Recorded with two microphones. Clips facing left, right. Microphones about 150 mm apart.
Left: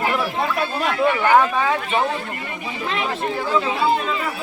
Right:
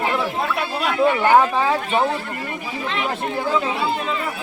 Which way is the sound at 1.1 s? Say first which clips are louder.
Right 1 dB; 20° right (ahead or behind).